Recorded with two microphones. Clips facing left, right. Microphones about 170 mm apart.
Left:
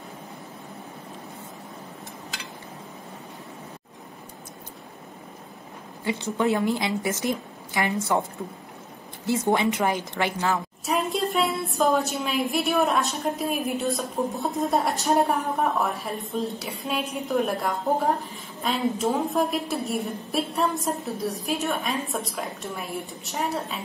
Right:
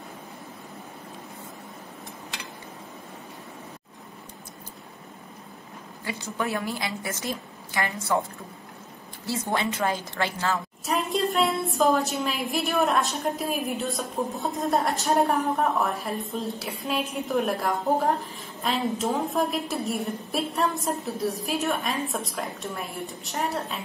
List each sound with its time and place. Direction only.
6.0 s a woman's voice: 20° left (ahead or behind)
9.2 s a woman's voice: 20° left (ahead or behind)
10.9 s a woman's voice: centre (ahead or behind)